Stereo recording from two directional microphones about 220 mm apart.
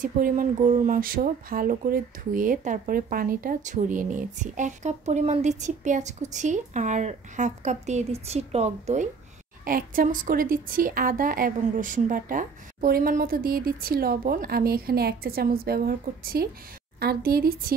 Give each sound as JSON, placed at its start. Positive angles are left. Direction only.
{"t": 0.0, "sound": "speech", "side_deg": -35}